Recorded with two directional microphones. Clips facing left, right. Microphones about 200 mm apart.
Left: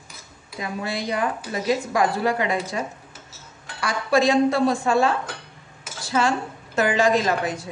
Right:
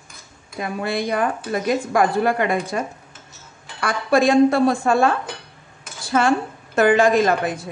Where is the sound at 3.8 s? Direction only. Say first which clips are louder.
Right 3 dB; 55° right (ahead or behind).